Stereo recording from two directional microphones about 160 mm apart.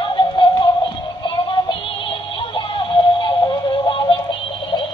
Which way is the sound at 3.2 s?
25° left (ahead or behind).